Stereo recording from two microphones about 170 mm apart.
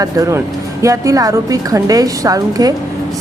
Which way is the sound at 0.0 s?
20° right (ahead or behind).